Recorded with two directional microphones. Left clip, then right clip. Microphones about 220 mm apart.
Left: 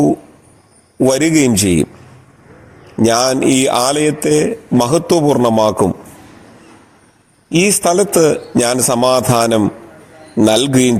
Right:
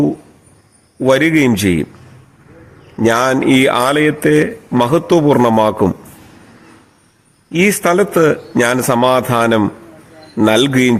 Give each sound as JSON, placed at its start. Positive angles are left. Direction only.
{"t": 0.9, "sound": "a man's voice", "side_deg": 15}
{"t": 2.9, "sound": "a man's voice", "side_deg": 15}
{"t": 7.5, "sound": "a man's voice", "side_deg": 15}